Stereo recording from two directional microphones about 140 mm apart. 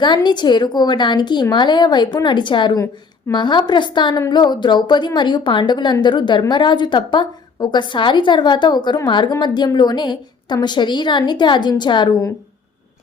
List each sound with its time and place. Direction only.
0.0 s a woman's voice: 30° left (ahead or behind)